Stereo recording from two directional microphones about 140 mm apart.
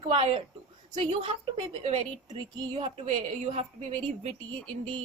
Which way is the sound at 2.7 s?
45° right (ahead or behind).